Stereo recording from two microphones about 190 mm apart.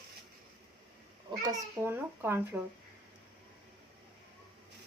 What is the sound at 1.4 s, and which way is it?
A child's voice, 15° right (ahead or behind).